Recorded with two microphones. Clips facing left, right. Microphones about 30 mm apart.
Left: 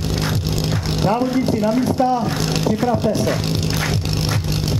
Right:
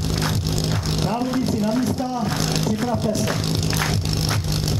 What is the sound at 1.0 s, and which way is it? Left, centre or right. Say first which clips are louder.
Speech: left 6 dB; centre.